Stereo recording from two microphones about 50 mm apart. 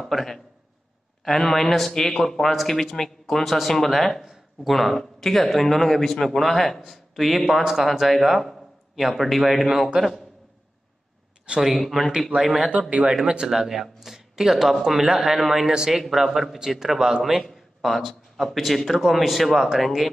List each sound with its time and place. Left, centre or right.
0.0 s a man's voice: centre
11.4 s speech: centre
11.7 s a man's voice: centre
12.4 s speech: centre
16.0 s a man's voice: centre